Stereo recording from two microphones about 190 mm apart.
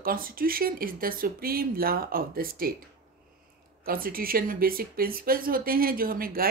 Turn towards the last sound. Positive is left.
turn(degrees=-50)  # may be behind; listen again after turning